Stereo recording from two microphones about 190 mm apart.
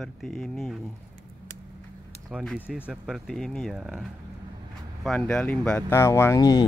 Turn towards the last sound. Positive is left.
turn(degrees=20)  # may be behind; listen again after turning